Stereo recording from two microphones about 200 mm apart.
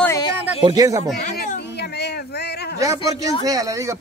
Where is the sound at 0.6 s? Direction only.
20° right (ahead or behind).